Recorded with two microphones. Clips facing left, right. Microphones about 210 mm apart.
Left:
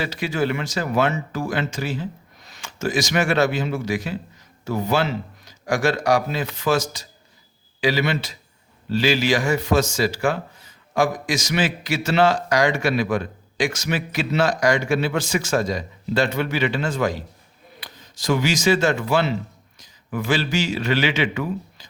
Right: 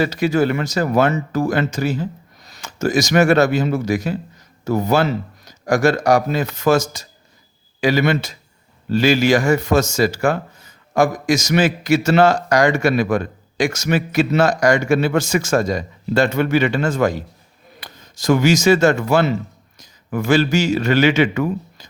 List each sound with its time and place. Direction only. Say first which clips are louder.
0.0 s a man's voice: right 7 dB; 40° right (ahead or behind)